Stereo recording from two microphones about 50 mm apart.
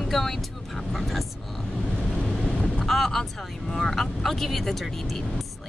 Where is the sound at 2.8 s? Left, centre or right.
Centre.